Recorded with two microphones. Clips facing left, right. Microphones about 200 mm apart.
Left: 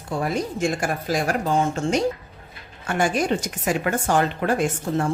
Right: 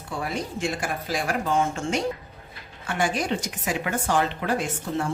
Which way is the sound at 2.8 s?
50° left (ahead or behind).